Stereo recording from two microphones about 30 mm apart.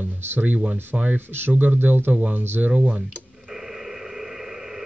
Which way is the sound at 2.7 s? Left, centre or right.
Right.